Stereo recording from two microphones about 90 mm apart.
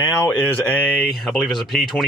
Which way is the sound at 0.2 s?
20° left (ahead or behind).